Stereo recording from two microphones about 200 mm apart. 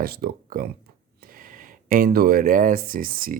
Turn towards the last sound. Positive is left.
turn(degrees=-45)  # may be behind; listen again after turning